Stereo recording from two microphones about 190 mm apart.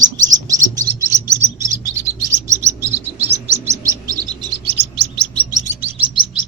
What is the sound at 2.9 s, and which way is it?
Chirp, 35° right (ahead or behind).